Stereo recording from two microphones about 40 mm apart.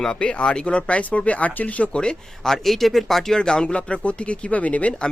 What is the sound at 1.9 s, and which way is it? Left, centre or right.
Speech, left.